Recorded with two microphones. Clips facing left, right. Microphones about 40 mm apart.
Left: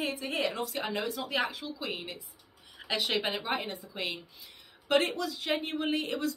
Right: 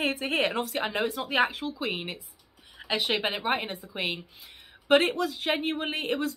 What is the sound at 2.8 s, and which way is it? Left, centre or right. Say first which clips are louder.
A woman's voice: right 3 dB; right.